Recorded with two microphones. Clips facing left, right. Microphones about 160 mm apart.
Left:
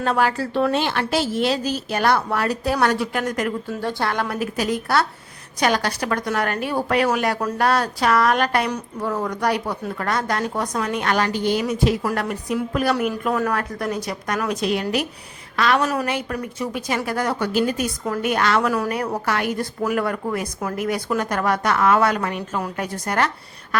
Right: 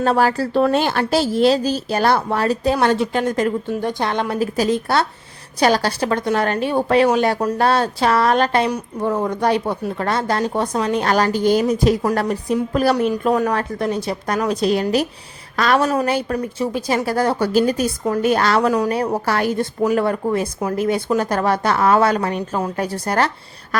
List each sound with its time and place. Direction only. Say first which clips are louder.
0.0 s a woman's voice: right 4 dB; 35° right (ahead or behind)